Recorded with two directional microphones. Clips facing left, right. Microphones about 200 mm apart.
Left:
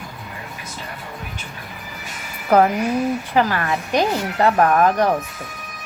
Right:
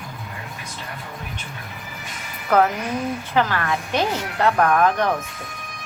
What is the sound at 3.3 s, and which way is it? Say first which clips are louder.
A woman's voice: even; 10° left (ahead or behind).